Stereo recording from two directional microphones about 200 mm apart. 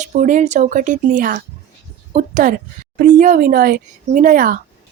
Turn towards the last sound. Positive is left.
turn(degrees=-40)  # may be behind; listen again after turning